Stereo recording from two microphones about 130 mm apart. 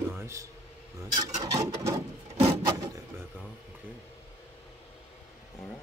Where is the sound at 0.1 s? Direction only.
20° right (ahead or behind).